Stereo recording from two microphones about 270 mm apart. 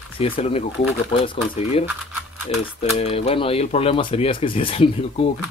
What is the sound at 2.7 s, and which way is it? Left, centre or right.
Speech, left.